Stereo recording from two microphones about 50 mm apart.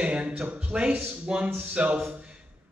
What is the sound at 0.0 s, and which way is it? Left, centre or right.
A man's voice, right.